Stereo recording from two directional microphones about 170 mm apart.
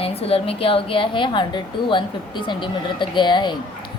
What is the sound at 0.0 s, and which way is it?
A woman's voice, 35° left (ahead or behind).